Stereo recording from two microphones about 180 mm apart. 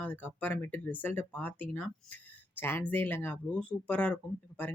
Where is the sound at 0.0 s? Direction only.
10° left (ahead or behind).